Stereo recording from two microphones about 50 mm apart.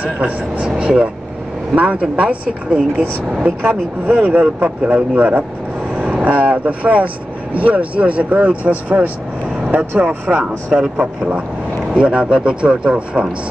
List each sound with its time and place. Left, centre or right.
0.0 s speech: right
3.6 s speech: right
4.3 s speech: right
10.7 s speech: centre